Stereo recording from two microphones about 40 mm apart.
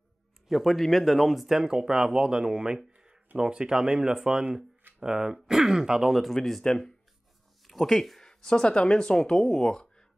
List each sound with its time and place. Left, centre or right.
0.5 s speech: centre
1.6 s speech: centre
6.1 s speech: centre
7.6 s speech: centre
8.2 s speech: centre